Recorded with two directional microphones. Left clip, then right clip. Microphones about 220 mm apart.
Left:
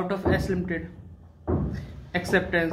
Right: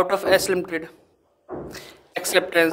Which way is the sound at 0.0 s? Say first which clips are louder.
Right 8 dB; 50° right (ahead or behind).